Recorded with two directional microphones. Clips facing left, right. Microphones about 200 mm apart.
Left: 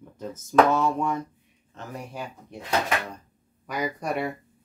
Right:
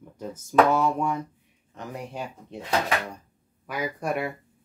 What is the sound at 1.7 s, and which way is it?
Speech, 20° right (ahead or behind).